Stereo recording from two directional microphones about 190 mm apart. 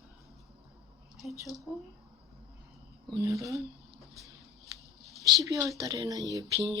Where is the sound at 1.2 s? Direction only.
Centre (ahead or behind).